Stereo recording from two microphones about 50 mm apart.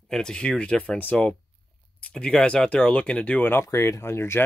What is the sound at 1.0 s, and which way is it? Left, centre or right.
Speech, left.